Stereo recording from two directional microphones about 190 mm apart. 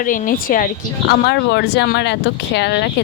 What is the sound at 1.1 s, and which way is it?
Speech, 60° left (ahead or behind).